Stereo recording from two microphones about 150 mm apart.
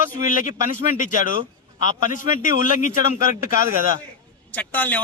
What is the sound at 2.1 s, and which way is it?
Speech, 60° left (ahead or behind).